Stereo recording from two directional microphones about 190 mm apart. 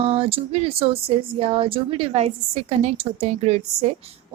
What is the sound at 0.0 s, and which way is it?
A woman's voice, 30° right (ahead or behind).